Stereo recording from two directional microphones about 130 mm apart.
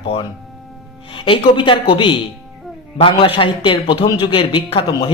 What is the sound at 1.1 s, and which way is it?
Speech, 40° left (ahead or behind).